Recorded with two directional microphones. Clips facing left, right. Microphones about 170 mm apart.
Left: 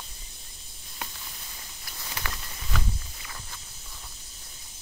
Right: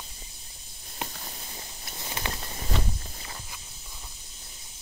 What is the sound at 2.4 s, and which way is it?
Walk, 35° right (ahead or behind).